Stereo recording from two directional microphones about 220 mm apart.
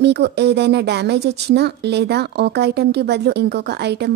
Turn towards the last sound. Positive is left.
turn(degrees=-50)  # may be behind; listen again after turning